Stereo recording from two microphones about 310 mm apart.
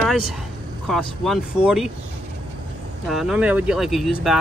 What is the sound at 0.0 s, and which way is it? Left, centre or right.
Vehicle, centre.